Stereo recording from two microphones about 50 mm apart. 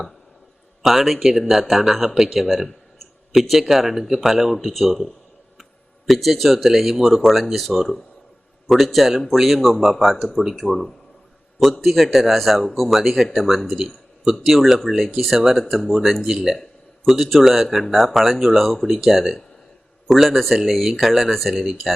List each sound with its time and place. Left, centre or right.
0.8 s speech: centre
13.7 s a sound: centre
14.4 s speech: centre